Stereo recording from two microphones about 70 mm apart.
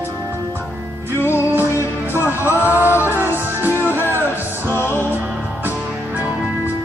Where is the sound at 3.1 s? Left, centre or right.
Right.